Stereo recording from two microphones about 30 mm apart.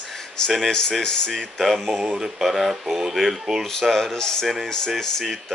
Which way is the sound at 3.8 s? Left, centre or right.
Centre.